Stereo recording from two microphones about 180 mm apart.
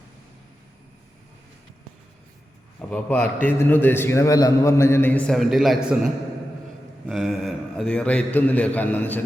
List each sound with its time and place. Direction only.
2.9 s a man's voice: 10° left (ahead or behind)
7.1 s a man's voice: centre (ahead or behind)